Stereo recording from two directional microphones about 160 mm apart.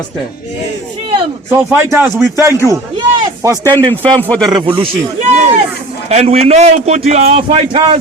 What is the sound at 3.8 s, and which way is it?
Speech, 30° right (ahead or behind).